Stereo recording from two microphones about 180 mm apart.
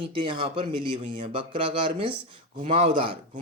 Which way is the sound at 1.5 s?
30° right (ahead or behind).